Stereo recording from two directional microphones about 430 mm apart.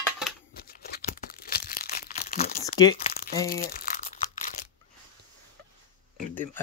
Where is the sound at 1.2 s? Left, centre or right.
Left.